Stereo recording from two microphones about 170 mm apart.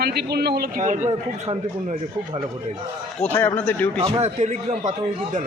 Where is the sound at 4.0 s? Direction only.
40° right (ahead or behind).